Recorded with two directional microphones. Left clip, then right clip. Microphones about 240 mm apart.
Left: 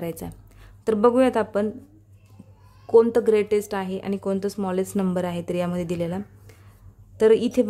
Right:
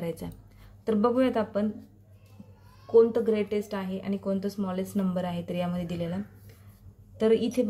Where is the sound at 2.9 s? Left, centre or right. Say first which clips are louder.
Left 5 dB; left.